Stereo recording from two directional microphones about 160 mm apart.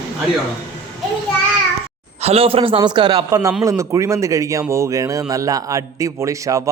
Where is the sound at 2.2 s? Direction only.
40° right (ahead or behind).